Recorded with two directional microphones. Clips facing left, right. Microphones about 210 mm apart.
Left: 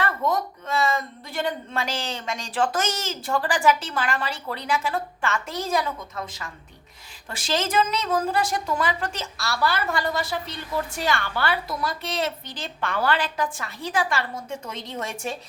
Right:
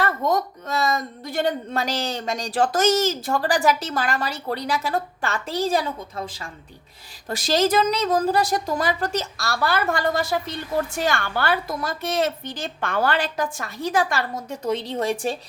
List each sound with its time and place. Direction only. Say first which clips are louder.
0.0 s a woman's voice: right 3 dB; 40° right (ahead or behind)